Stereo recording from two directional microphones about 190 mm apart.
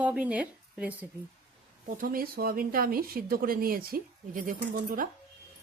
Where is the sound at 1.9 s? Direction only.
50° right (ahead or behind).